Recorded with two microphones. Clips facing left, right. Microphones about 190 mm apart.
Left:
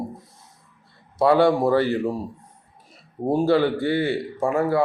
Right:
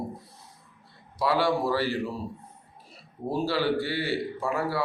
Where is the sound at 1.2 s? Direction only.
55° left (ahead or behind).